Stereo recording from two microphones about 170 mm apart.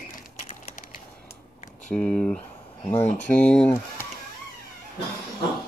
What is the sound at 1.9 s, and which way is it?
Speech, 5° left (ahead or behind).